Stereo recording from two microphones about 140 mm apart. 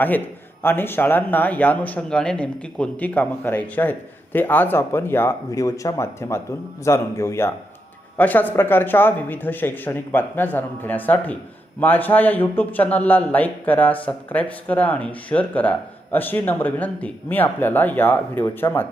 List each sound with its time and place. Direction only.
0.6 s speech: 15° left (ahead or behind)